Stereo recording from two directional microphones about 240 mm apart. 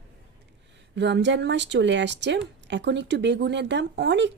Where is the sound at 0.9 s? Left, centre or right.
Right.